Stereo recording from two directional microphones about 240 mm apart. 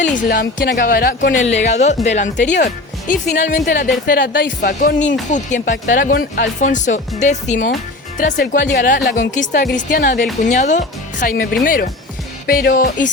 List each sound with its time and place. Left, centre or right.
0.0 s a woman's voice: left
9.0 s a woman's voice: left
9.4 s a woman's voice: left